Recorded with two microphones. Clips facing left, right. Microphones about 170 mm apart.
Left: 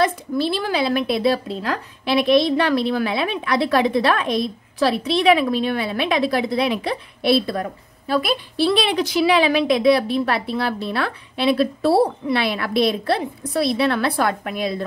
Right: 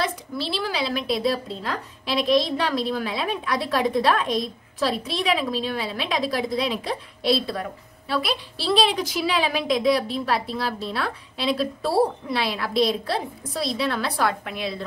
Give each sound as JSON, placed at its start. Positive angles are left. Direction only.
{"t": 0.0, "sound": "a woman's voice", "side_deg": 50}